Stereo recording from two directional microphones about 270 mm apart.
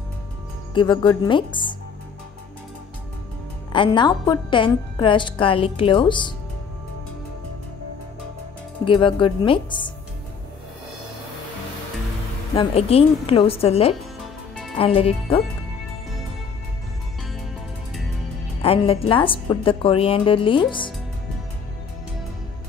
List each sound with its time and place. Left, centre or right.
0.7 s a woman's voice: centre
3.7 s a woman's voice: centre
8.8 s a woman's voice: centre
12.5 s a woman's voice: left
18.6 s a woman's voice: left